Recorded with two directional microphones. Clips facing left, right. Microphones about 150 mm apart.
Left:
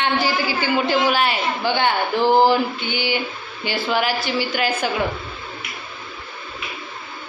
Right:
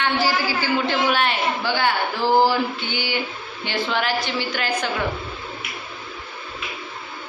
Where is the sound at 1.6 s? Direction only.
20° left (ahead or behind).